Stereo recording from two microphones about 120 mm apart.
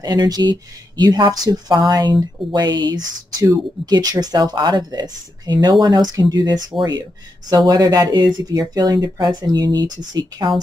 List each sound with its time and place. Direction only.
0.0 s speech: 35° right (ahead or behind)